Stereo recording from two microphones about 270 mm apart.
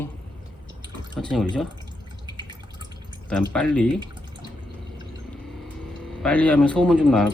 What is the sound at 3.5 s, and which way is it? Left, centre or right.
Speech, centre.